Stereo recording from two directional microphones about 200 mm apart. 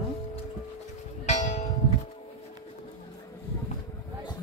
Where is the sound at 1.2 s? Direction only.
35° left (ahead or behind).